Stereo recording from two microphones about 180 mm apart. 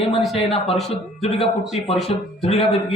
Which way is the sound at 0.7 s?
Centre (ahead or behind).